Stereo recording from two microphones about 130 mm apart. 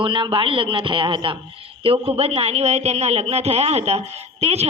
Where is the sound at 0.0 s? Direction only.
40° right (ahead or behind).